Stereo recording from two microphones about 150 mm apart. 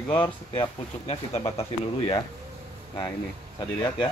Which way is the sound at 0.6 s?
45° left (ahead or behind).